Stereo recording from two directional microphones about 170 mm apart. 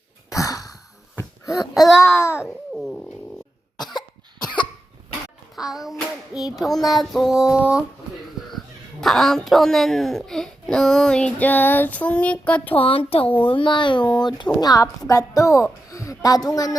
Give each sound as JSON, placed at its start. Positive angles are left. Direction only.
{"t": 0.3, "sound": "a sound", "side_deg": 20}
{"t": 2.0, "sound": "a child's voice", "side_deg": 15}
{"t": 2.3, "sound": "babbling", "side_deg": -5}
{"t": 3.8, "sound": "cough", "side_deg": 25}
{"t": 5.5, "sound": "music", "side_deg": 0}
{"t": 6.4, "sound": "a woman's voice", "side_deg": 0}
{"t": 12.7, "sound": "a woman's voice", "side_deg": 35}